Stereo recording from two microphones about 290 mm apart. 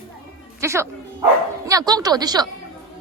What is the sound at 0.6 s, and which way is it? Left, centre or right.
A woman's voice, centre.